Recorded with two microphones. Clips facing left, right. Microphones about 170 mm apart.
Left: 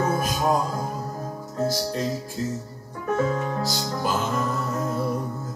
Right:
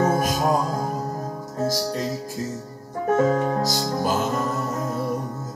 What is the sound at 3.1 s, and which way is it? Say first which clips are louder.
Music: right 4 dB; 45° right (ahead or behind).